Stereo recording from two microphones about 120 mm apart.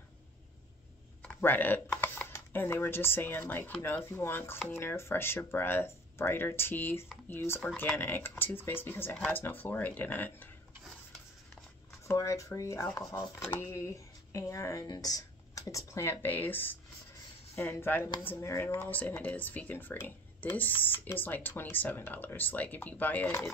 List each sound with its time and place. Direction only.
1.2 s speech: 15° left (ahead or behind)
12.1 s speech: 25° left (ahead or behind)